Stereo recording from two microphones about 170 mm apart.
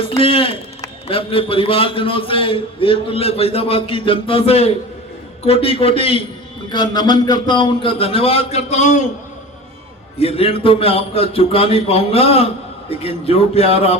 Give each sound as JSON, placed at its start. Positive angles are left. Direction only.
{"t": 0.2, "sound": "a man's voice", "side_deg": 35}
{"t": 10.2, "sound": "a man's voice", "side_deg": 35}